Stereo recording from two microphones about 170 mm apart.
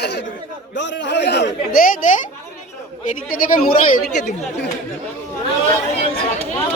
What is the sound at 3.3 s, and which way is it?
Speech, 55° left (ahead or behind).